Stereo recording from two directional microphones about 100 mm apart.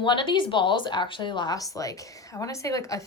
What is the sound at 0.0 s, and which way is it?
A woman's voice, 50° left (ahead or behind).